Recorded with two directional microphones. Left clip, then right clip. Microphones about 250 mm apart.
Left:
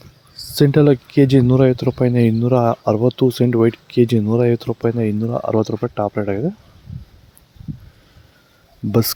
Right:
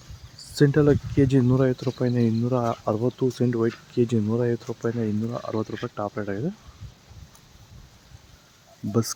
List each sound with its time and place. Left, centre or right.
0.3 s speech: left
8.9 s speech: left